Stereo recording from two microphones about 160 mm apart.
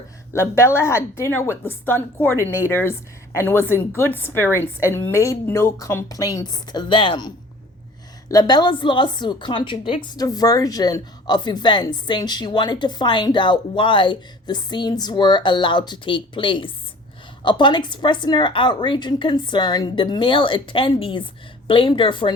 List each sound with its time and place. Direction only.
0.3 s a woman's voice: 15° left (ahead or behind)